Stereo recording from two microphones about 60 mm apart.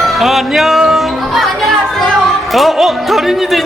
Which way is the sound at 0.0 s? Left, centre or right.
Centre.